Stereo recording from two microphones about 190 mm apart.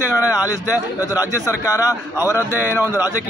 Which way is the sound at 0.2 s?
15° left (ahead or behind).